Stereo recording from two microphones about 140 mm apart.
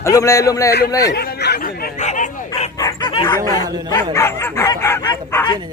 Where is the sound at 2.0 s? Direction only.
65° left (ahead or behind).